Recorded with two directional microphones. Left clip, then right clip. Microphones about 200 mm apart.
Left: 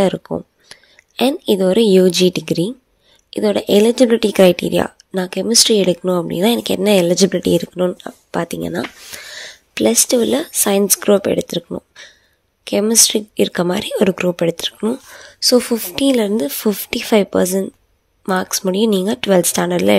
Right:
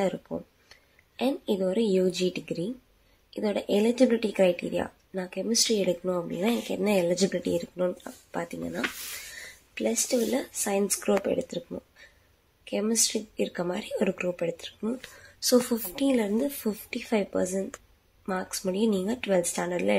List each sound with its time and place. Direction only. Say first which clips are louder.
0.0 s speech: left 12 dB; 45° left (ahead or behind)
15.4 s speech: left 10 dB; 30° left (ahead or behind)
15.9 s speech: left 11 dB; 50° left (ahead or behind)